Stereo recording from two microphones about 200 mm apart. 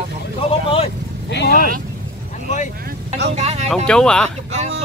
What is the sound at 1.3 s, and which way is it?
Vehicle, 50° left (ahead or behind).